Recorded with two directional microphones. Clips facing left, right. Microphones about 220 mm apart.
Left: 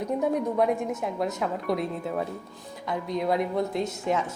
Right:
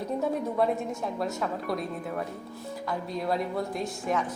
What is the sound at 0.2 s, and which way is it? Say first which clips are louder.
A woman's voice: left 2 dB; 15° left (ahead or behind).